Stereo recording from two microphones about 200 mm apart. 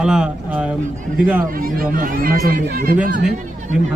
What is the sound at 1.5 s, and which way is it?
Speech, 45° right (ahead or behind).